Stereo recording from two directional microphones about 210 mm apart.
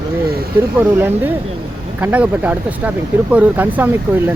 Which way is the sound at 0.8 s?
10° right (ahead or behind).